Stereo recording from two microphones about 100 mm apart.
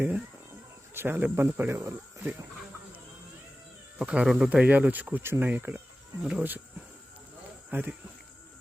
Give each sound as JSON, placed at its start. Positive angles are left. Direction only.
{"t": 0.9, "sound": "a man's voice", "side_deg": -20}
{"t": 3.9, "sound": "speech", "side_deg": -10}
{"t": 7.7, "sound": "a man's voice", "side_deg": -20}